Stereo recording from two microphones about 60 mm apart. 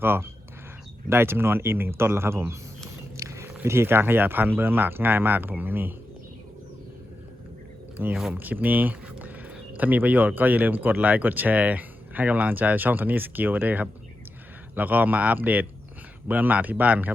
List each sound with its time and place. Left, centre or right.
0.0 s speech: right
8.0 s speech: right